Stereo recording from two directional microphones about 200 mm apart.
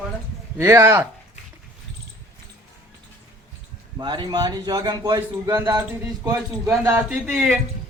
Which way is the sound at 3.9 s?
20° right (ahead or behind).